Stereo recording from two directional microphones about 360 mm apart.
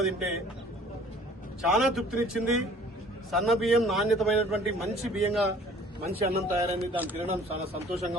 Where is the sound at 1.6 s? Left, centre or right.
Centre.